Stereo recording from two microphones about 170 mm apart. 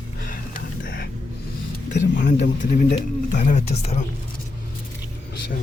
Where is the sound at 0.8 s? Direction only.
65° left (ahead or behind).